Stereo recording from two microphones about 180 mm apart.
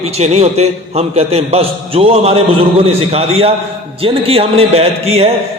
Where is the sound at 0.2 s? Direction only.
35° right (ahead or behind).